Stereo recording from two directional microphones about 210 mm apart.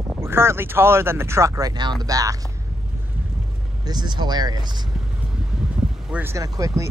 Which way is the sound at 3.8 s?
20° right (ahead or behind).